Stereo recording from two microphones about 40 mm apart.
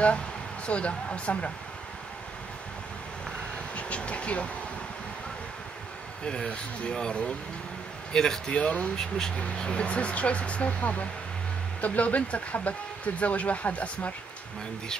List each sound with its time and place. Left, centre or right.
0.7 s speech: left
3.7 s vehicle: left
6.2 s speech: left
8.5 s speech: left